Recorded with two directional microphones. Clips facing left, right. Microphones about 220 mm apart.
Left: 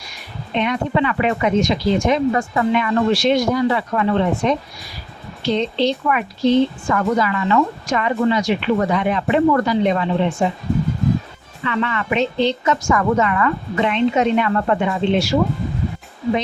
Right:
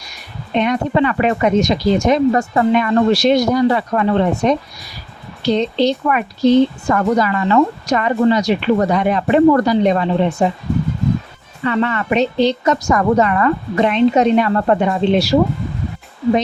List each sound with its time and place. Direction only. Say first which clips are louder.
0.5 s a woman's voice: right 3 dB; 45° right (ahead or behind)
11.6 s a woman's voice: right 4 dB; 40° right (ahead or behind)